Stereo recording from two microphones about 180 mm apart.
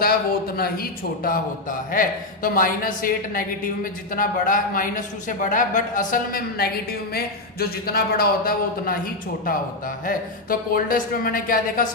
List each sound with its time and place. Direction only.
0.0 s a man's voice: 55° left (ahead or behind)